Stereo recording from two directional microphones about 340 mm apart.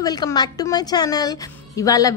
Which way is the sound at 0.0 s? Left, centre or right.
Centre.